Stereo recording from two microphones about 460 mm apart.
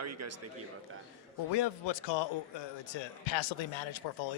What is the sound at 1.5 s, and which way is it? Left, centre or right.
A man's voice, left.